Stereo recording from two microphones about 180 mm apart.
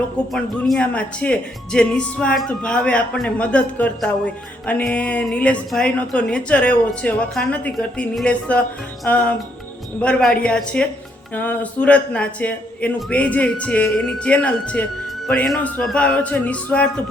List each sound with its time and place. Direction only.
0.3 s speech: 5° left (ahead or behind)